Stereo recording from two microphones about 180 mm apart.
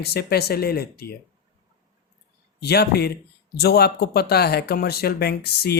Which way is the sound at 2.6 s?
65° left (ahead or behind).